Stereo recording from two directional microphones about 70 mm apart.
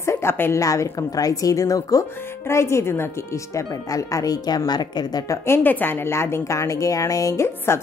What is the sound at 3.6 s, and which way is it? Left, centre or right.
Speech, left.